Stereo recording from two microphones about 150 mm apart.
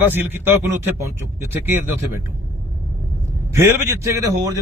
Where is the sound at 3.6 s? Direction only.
20° right (ahead or behind).